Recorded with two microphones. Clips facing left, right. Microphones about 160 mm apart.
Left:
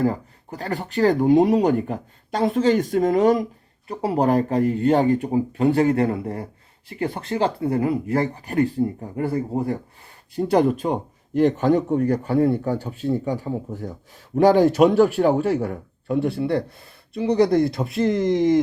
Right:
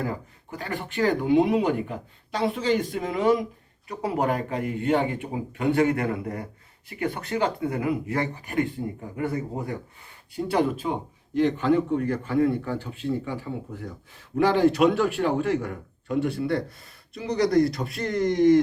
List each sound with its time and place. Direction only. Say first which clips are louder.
0.0 s speech: left 8 dB; 35° left (ahead or behind)
3.8 s speech: left 5 dB; 30° left (ahead or behind)